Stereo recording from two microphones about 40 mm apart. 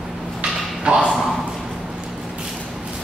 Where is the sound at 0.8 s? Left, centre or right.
Right.